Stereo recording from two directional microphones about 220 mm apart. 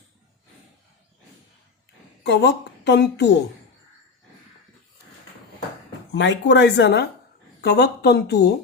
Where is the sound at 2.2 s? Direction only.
50° left (ahead or behind).